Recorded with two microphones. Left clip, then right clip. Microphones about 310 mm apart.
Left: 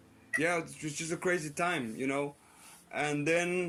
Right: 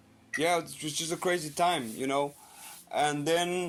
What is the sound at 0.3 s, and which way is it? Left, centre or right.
Speech, right.